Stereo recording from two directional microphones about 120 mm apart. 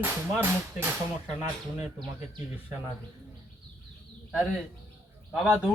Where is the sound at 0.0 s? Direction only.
15° right (ahead or behind).